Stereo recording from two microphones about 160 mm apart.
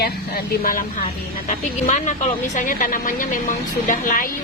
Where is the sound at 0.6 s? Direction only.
60° left (ahead or behind).